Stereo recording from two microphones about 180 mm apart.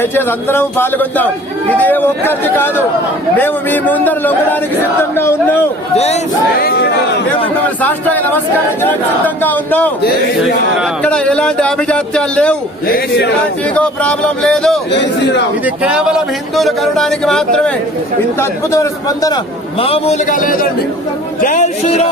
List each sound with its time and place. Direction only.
0.0 s speech: 10° left (ahead or behind)
6.6 s a man's voice: 60° left (ahead or behind)
7.8 s speech: 10° left (ahead or behind)
11.0 s speech: 5° left (ahead or behind)
12.9 s a man's voice: 65° left (ahead or behind)
13.7 s speech: 5° left (ahead or behind)
15.6 s speech: 5° right (ahead or behind)
18.3 s a man's voice: 15° left (ahead or behind)
19.8 s a man's voice: 35° left (ahead or behind)